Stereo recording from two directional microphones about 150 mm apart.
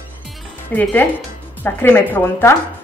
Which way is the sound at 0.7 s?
10° left (ahead or behind).